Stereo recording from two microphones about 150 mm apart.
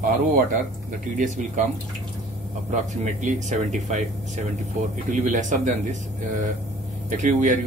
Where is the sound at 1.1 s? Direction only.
55° right (ahead or behind).